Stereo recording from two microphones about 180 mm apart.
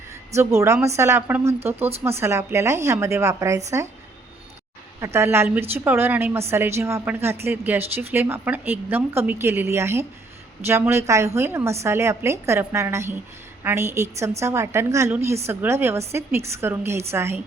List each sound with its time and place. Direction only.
0.3 s a woman's voice: 15° right (ahead or behind)
4.9 s a woman's voice: 15° right (ahead or behind)